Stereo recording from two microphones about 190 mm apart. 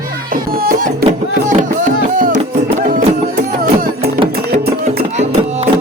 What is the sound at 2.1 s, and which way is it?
Music, 45° right (ahead or behind).